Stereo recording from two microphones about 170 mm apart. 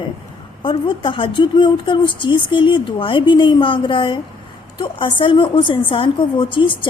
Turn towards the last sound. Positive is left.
turn(degrees=30)  # may be behind; listen again after turning